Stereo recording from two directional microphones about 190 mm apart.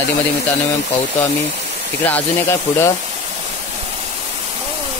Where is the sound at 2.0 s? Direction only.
10° left (ahead or behind).